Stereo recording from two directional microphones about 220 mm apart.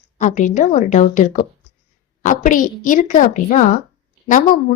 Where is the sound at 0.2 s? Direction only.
35° left (ahead or behind).